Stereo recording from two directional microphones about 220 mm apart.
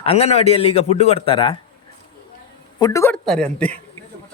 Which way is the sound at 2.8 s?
15° left (ahead or behind).